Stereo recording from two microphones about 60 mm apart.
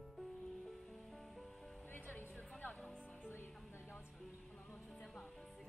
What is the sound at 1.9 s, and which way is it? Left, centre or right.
Music, left.